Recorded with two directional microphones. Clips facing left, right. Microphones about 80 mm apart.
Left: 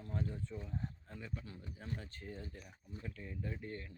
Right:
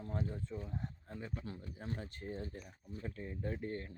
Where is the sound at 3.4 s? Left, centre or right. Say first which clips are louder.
Right 5 dB; right.